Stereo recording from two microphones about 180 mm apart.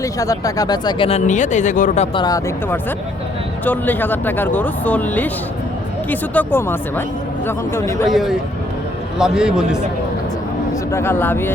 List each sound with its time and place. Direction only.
0.0 s speech: 20° left (ahead or behind); by 2.0 s 45° left (ahead or behind)
2.1 s speech: 20° left (ahead or behind)
3.6 s speech: 10° left (ahead or behind)
8.0 s a man's voice: centre (ahead or behind)
10.9 s speech: 10° left (ahead or behind)